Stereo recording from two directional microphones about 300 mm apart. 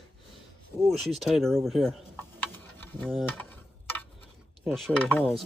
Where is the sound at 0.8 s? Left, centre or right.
Centre.